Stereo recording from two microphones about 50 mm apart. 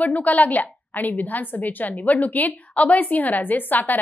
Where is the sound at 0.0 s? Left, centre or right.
Left.